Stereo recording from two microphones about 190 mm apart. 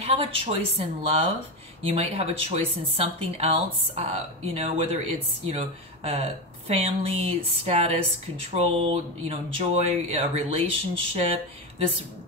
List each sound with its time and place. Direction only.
0.0 s speech: 30° right (ahead or behind)